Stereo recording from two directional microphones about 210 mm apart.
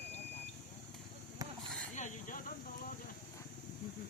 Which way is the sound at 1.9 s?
35° left (ahead or behind).